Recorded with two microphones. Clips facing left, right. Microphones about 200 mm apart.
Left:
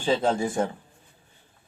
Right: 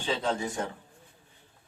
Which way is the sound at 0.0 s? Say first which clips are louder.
Left 6 dB; 50° left (ahead or behind).